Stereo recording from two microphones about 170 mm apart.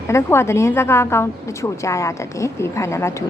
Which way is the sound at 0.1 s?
15° left (ahead or behind).